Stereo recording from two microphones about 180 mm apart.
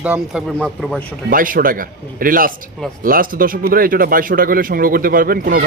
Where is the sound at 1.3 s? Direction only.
50° right (ahead or behind).